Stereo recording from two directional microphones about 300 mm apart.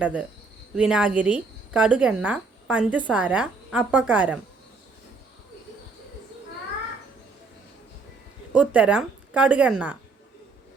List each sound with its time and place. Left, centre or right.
0.0 s a woman's voice: centre
8.5 s a woman's voice: centre